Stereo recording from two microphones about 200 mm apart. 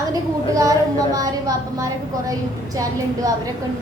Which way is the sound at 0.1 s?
15° right (ahead or behind).